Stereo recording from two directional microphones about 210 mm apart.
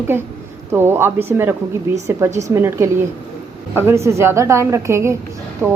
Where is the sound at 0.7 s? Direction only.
10° right (ahead or behind).